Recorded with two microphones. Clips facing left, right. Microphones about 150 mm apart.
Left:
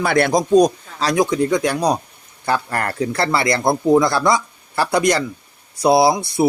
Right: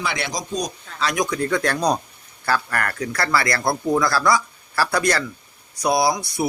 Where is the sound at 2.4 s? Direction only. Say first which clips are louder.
Left 2 dB; 25° left (ahead or behind).